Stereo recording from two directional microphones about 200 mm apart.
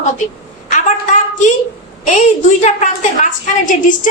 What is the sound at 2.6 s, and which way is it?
A woman's voice, 40° left (ahead or behind).